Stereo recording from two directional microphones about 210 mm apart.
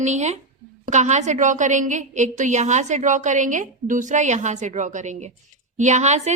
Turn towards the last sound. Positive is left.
turn(degrees=-35)  # may be behind; listen again after turning